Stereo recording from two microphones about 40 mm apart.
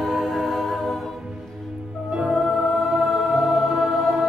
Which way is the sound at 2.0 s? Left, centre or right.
Right.